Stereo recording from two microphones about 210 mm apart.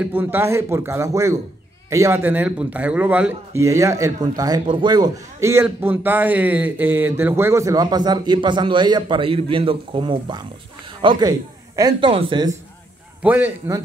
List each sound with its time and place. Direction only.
0.0 s a man's voice: 10° right (ahead or behind)
13.2 s a man's voice: 10° right (ahead or behind)